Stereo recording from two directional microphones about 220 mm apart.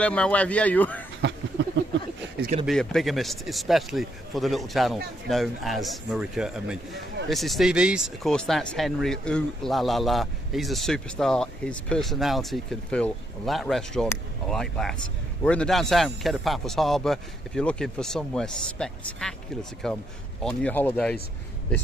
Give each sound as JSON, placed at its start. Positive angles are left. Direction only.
{"t": 0.0, "sound": "speech", "side_deg": 5}
{"t": 1.2, "sound": "a sound", "side_deg": -55}
{"t": 2.6, "sound": "speech", "side_deg": 0}